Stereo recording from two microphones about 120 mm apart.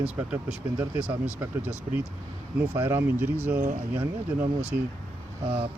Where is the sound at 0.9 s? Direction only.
15° right (ahead or behind).